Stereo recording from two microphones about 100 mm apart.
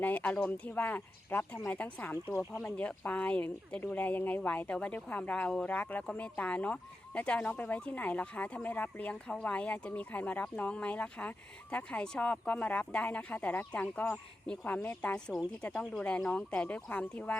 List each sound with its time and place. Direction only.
0.0 s a woman's voice: 15° left (ahead or behind)
15.3 s speech: 10° right (ahead or behind)
15.6 s speech: 10° left (ahead or behind)